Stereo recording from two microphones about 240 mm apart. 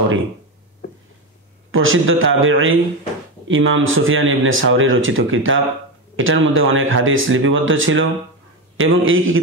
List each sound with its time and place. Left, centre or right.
1.7 s speech: right